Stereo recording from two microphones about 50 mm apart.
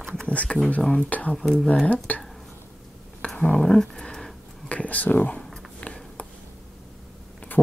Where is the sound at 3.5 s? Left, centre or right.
Centre.